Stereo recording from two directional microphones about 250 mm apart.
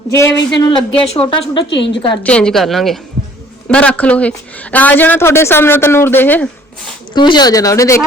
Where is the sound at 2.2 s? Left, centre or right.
Centre.